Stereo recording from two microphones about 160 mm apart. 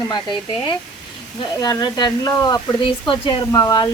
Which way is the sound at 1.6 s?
25° left (ahead or behind).